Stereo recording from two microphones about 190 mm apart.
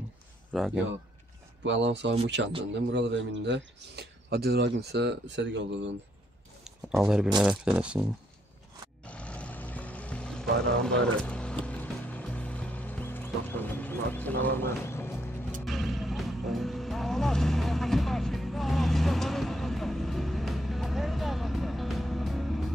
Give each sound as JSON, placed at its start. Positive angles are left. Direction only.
{"t": 0.5, "sound": "speech", "side_deg": -5}
{"t": 1.6, "sound": "speech", "side_deg": -70}
{"t": 6.6, "sound": "a sound", "side_deg": 0}
{"t": 7.3, "sound": "speech", "side_deg": -5}
{"t": 9.0, "sound": "vehicle", "side_deg": 5}
{"t": 10.8, "sound": "speech", "side_deg": 5}
{"t": 11.6, "sound": "music", "side_deg": 10}
{"t": 15.6, "sound": "music", "side_deg": 0}